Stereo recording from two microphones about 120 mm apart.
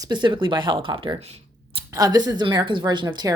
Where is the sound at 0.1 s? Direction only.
40° right (ahead or behind).